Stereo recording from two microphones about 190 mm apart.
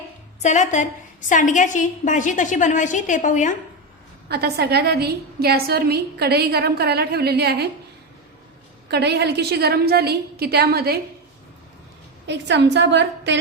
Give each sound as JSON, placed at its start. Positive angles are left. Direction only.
{"t": 0.4, "sound": "a woman's voice", "side_deg": 40}
{"t": 4.3, "sound": "a woman's voice", "side_deg": -55}
{"t": 8.9, "sound": "a woman's voice", "side_deg": -60}
{"t": 12.3, "sound": "a woman's voice", "side_deg": -65}